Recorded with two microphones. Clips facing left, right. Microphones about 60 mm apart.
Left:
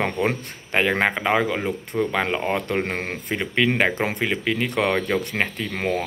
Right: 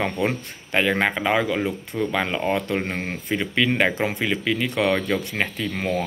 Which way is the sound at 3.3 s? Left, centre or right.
Left.